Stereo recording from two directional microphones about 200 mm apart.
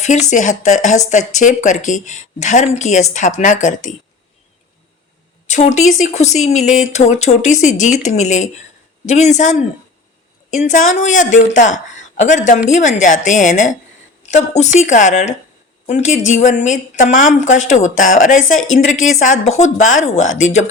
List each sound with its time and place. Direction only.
0.0 s speech: 35° left (ahead or behind)
5.5 s speech: 35° left (ahead or behind)
11.1 s a woman's voice: 40° left (ahead or behind)
20.3 s speech: 80° left